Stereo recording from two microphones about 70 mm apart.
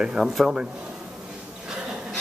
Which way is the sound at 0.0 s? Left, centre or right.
Centre.